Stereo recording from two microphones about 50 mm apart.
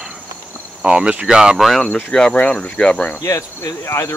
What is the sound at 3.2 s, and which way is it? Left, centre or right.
Speech, left.